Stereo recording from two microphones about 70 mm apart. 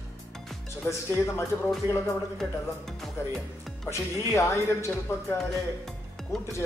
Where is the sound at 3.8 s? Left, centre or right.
Left.